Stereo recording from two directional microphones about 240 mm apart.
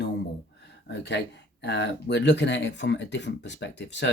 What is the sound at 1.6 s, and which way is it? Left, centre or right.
Speech, left.